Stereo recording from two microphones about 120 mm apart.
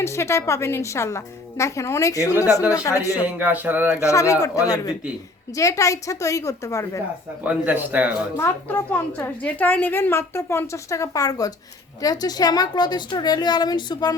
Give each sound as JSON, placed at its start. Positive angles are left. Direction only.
{"t": 0.0, "sound": "a woman's voice", "side_deg": 25}
{"t": 3.2, "sound": "speech", "side_deg": -15}
{"t": 4.0, "sound": "a woman's voice", "side_deg": 25}
{"t": 7.4, "sound": "speech", "side_deg": -15}
{"t": 8.4, "sound": "a woman's voice", "side_deg": 15}